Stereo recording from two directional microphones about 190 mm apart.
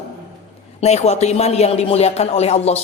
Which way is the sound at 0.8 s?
35° left (ahead or behind).